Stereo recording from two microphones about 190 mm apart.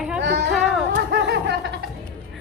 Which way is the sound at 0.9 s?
60° right (ahead or behind).